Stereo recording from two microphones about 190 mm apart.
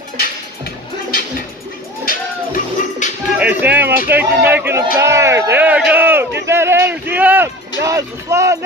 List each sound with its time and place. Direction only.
2.0 s music: 45° left (ahead or behind)
3.3 s a sound: 10° right (ahead or behind)
4.1 s speech: 10° right (ahead or behind)
6.4 s music: 15° right (ahead or behind)